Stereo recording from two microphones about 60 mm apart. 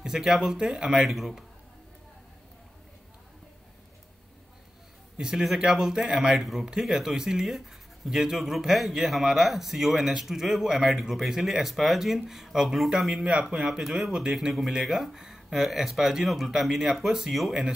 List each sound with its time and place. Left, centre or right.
0.0 s speech: centre
5.1 s speech: centre
12.9 s speech: centre